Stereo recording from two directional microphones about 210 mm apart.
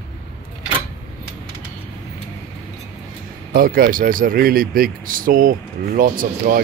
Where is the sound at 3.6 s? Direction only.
45° right (ahead or behind).